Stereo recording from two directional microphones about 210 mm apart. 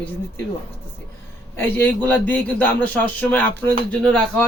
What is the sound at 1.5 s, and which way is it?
Speech, 10° left (ahead or behind).